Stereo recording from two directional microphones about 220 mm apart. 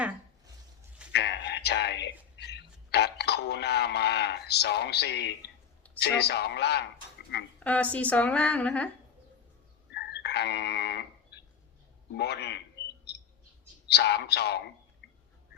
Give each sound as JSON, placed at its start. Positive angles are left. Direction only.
{"t": 1.1, "sound": "a sound", "side_deg": 50}
{"t": 6.1, "sound": "a man's voice", "side_deg": 50}
{"t": 7.6, "sound": "a woman's voice", "side_deg": 5}
{"t": 9.9, "sound": "a sound", "side_deg": 50}
{"t": 12.1, "sound": "a man's voice", "side_deg": 50}
{"t": 13.8, "sound": "a man's voice", "side_deg": 50}